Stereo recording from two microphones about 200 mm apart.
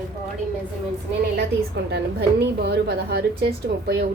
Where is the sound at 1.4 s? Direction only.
55° right (ahead or behind).